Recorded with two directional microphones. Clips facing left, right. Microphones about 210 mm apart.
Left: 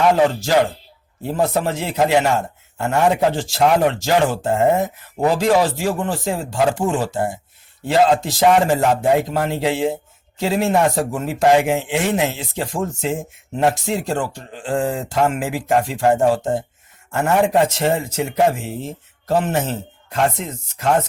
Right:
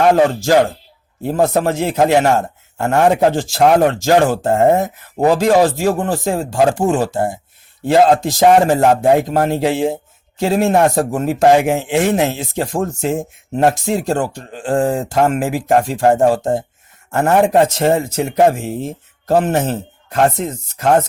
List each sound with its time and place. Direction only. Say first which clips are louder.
1.2 s speech: right 4 dB; 45° right (ahead or behind)